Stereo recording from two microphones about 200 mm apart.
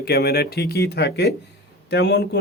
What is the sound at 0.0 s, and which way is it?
A man's voice, 50° left (ahead or behind).